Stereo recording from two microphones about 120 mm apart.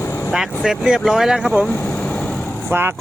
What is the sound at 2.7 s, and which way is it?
Speech, 20° right (ahead or behind).